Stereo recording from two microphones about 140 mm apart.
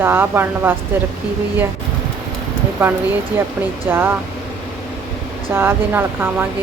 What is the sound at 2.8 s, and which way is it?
Speech, 15° right (ahead or behind).